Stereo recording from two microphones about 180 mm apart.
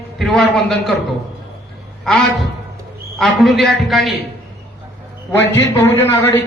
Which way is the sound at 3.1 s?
Centre (ahead or behind).